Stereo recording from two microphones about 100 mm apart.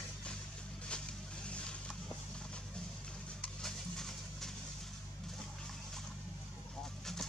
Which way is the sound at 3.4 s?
5° left (ahead or behind).